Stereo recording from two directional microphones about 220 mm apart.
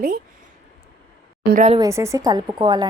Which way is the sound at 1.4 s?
40° right (ahead or behind).